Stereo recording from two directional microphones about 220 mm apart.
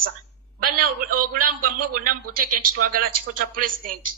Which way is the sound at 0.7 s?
90° right.